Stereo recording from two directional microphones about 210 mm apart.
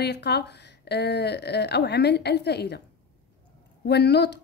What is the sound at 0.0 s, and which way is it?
A woman's voice, 50° left (ahead or behind).